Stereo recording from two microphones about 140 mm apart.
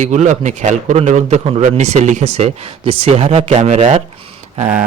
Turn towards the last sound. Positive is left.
turn(degrees=-60)  # may be behind; listen again after turning